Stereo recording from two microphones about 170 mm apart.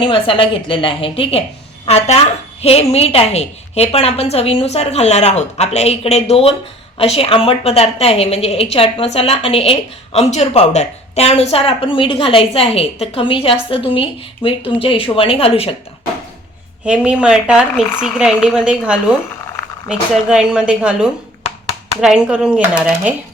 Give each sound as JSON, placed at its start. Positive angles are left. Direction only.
{"t": 0.0, "sound": "a woman's voice", "side_deg": 30}
{"t": 16.8, "sound": "speech", "side_deg": -5}